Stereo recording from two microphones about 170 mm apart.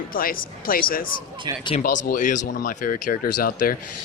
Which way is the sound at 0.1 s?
55° left (ahead or behind).